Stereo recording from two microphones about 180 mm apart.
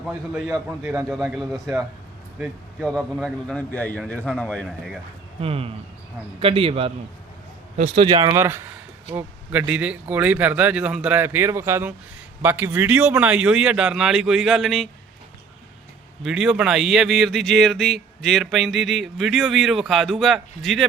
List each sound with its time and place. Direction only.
0.0 s speech: centre (ahead or behind)
0.4 s speech: 15° right (ahead or behind)
1.1 s speech: centre (ahead or behind)
5.4 s a man's voice: 30° right (ahead or behind)
8.4 s speech: 15° right (ahead or behind)
16.2 s speech: centre (ahead or behind)